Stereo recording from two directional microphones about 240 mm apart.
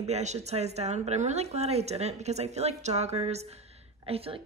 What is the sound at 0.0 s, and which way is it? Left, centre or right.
A woman's voice, right.